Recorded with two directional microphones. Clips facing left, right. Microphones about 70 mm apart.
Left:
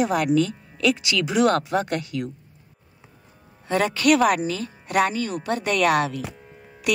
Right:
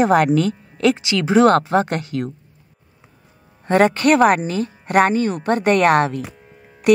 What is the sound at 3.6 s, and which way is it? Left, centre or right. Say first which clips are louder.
Speech: right 6 dB; right.